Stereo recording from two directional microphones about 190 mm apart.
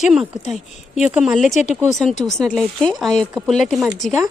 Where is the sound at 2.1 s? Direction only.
40° left (ahead or behind).